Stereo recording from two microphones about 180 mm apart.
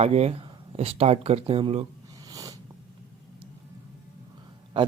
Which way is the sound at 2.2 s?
20° right (ahead or behind).